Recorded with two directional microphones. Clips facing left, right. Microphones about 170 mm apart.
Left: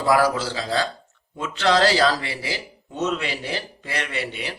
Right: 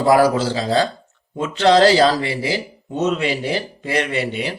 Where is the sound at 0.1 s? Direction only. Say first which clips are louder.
Right 5 dB; 25° right (ahead or behind).